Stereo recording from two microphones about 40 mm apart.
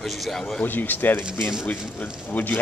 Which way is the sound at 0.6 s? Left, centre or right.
Left.